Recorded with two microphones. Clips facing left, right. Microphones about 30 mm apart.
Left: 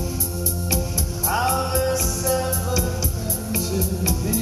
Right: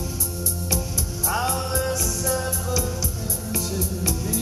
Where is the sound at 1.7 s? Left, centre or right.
Left.